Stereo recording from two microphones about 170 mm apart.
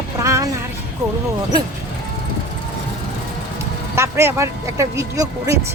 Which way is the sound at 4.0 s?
15° right (ahead or behind).